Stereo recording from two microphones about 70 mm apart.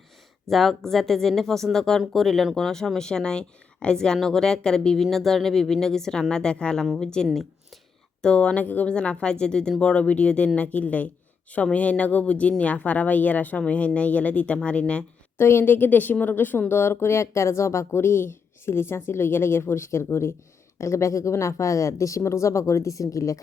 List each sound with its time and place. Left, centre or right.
0.5 s speech: centre
15.4 s speech: left